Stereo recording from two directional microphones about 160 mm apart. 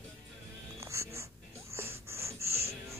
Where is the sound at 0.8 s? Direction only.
15° right (ahead or behind).